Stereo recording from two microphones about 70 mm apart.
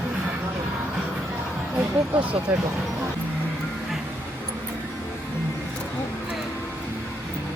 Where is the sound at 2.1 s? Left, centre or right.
Right.